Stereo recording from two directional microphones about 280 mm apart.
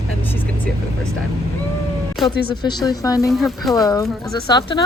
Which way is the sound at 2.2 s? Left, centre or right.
Centre.